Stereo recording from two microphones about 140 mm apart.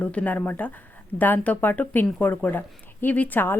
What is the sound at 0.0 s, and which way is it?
Speech, 10° left (ahead or behind).